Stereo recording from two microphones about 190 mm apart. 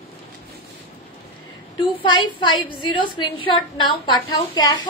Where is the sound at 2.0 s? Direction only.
25° left (ahead or behind).